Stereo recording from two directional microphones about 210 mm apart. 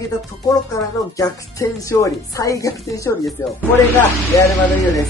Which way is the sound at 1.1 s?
15° left (ahead or behind).